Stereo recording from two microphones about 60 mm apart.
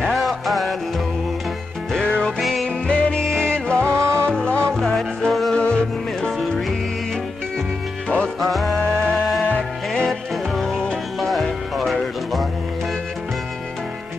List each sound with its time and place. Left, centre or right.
0.0 s music: centre
1.9 s music: centre
2.4 s music: centre
2.9 s music: centre
3.9 s music: right
4.3 s music: centre
5.5 s music: centre
8.4 s music: centre
9.6 s music: centre